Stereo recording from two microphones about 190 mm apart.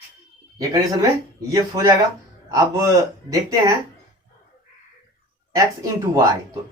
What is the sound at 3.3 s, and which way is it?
Speech, 20° right (ahead or behind).